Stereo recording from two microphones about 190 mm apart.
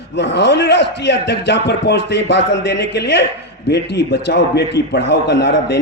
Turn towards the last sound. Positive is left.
turn(degrees=65)  # may be behind; listen again after turning